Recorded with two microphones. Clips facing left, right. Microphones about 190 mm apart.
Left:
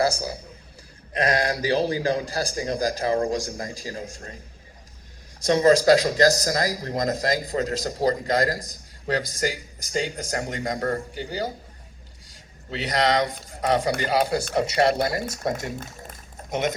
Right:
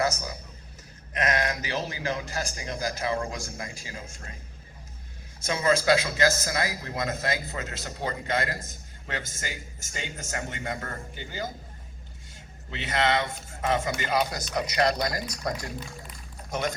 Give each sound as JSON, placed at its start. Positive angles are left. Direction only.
{"t": 0.0, "sound": "a man's voice", "side_deg": 30}
{"t": 5.5, "sound": "speech", "side_deg": 35}
{"t": 12.7, "sound": "speech", "side_deg": 35}